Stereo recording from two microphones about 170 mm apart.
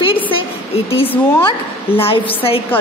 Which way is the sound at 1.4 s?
30° left (ahead or behind).